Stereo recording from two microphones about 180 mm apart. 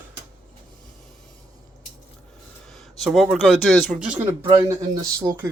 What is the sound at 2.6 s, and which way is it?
Speech, centre (ahead or behind).